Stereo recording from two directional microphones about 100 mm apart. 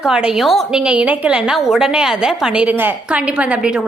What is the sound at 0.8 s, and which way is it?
A woman's voice, 15° right (ahead or behind).